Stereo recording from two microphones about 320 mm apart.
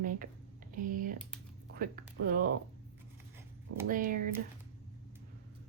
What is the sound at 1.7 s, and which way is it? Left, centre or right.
Speech, right.